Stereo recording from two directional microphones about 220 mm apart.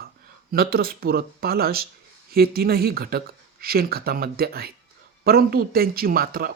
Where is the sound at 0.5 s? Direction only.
45° right (ahead or behind).